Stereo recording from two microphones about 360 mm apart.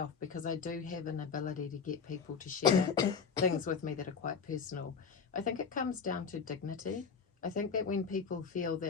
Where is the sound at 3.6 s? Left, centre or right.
Left.